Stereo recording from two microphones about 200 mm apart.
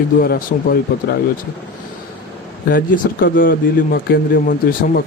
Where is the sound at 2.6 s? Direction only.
45° left (ahead or behind).